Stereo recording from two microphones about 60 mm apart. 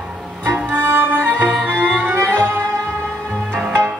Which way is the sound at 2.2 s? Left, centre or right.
Right.